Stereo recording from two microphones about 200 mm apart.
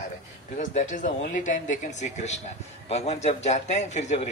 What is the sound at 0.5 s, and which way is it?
Speech, 40° left (ahead or behind).